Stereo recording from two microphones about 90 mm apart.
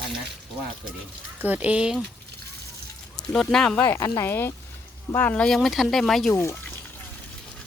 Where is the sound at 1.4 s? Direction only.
20° right (ahead or behind).